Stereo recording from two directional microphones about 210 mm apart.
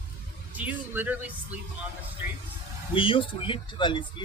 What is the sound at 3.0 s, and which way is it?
Speech, 25° left (ahead or behind).